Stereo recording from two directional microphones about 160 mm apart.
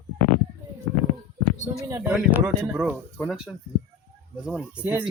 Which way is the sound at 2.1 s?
10° right (ahead or behind).